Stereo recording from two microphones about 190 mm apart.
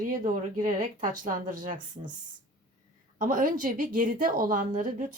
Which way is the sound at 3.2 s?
45° right (ahead or behind).